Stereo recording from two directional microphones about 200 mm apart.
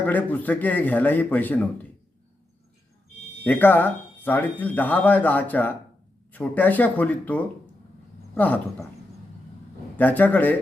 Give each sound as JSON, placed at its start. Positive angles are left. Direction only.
{"t": 0.0, "sound": "speech", "side_deg": 10}
{"t": 3.4, "sound": "speech", "side_deg": 10}
{"t": 10.0, "sound": "speech", "side_deg": 10}